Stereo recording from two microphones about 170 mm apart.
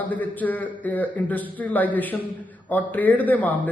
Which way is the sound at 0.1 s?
10° left (ahead or behind).